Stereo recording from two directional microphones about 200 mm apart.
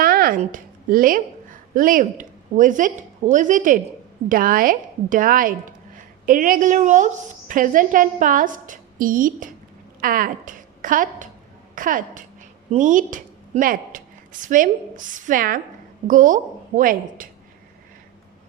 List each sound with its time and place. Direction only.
0.0 s a woman's voice: 50° right (ahead or behind)